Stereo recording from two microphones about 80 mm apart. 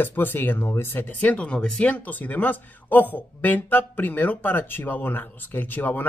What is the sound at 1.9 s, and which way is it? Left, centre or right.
Speech, left.